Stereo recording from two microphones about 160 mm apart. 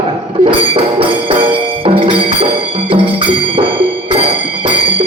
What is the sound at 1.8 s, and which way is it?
Speech, 35° right (ahead or behind).